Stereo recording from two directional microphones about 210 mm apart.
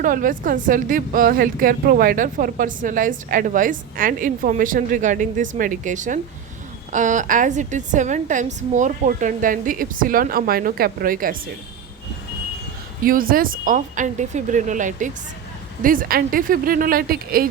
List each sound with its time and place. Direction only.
0.0 s speech: 40° right (ahead or behind)
13.1 s speech: 45° right (ahead or behind)